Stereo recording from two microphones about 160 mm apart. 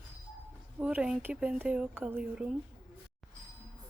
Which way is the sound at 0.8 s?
5° right (ahead or behind).